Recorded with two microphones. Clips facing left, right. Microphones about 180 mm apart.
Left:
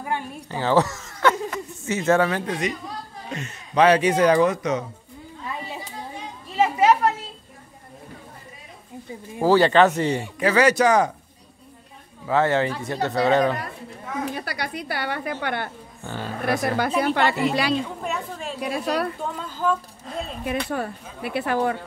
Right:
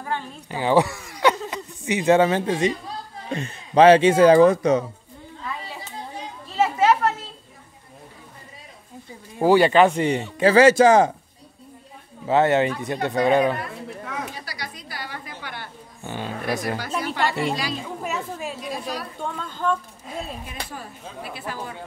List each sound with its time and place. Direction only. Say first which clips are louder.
0.0 s a sound: left 1 dB; 15° left (ahead or behind)
0.5 s speech: right 1 dB; 15° right (ahead or behind); by 4.8 s 30° right (ahead or behind)
6.5 s chatter: left 1 dB; 10° left (ahead or behind)
9.4 s speech: right 1 dB; 15° right (ahead or behind)
10.4 s speech: right 5 dB; 30° right (ahead or behind)
12.3 s speech: right 2 dB; 20° right (ahead or behind)
14.3 s a woman's voice: left 7 dB; 60° left (ahead or behind)
16.0 s speech: right 1 dB; 15° right (ahead or behind)
16.4 s a woman's voice: left 6 dB; 60° left (ahead or behind)
18.0 s speech: even; 5° right (ahead or behind)
18.6 s speech: left 6 dB; 65° left (ahead or behind)
19.1 s speech: left 1 dB; 5° left (ahead or behind)
20.1 s speech: left 1 dB; 5° right (ahead or behind)
20.4 s a woman's voice: left 10 dB; 65° left (ahead or behind)